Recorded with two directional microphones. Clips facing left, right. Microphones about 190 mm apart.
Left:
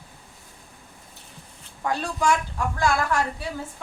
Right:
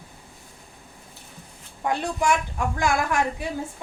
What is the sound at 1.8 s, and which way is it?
A woman's voice, 20° right (ahead or behind).